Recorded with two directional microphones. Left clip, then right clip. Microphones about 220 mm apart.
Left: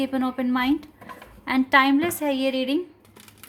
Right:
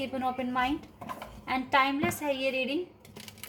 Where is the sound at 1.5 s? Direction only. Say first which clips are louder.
Left 7 dB; 50° left (ahead or behind).